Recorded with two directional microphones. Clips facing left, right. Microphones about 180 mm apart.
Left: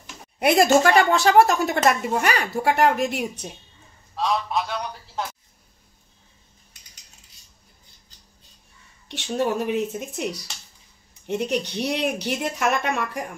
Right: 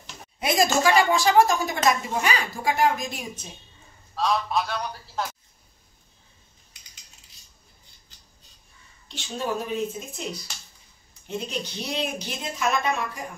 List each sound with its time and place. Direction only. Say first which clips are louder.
0.4 s a woman's voice: left 5 dB; 65° left (ahead or behind)
4.1 s a man's voice: even; 15° left (ahead or behind)
9.1 s a woman's voice: left 5 dB; 70° left (ahead or behind)